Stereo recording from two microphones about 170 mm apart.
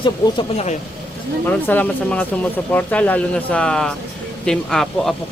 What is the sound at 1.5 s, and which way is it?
Speech, 10° left (ahead or behind).